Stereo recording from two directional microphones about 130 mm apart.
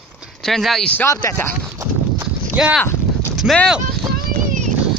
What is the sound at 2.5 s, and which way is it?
Speech, 10° right (ahead or behind).